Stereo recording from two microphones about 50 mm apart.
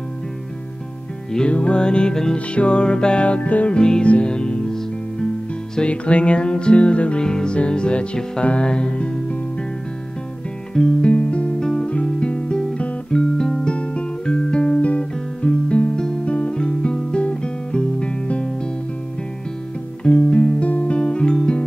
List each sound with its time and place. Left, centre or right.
1.5 s music: left
10.7 s music: centre
11.6 s guitar: centre
13.7 s guitar: left
20.0 s music: left